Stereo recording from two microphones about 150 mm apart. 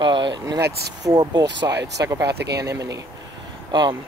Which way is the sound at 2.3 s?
90° right.